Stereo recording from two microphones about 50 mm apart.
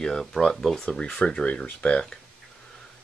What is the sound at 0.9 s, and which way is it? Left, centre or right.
Speech, left.